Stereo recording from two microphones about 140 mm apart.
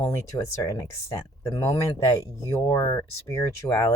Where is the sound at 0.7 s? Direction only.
20° left (ahead or behind).